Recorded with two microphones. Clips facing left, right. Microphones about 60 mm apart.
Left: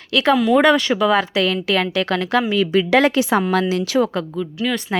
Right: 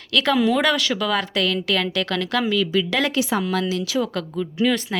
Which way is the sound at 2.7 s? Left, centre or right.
Left.